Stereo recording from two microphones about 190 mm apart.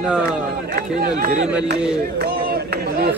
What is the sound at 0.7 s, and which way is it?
Speech, 50° right (ahead or behind).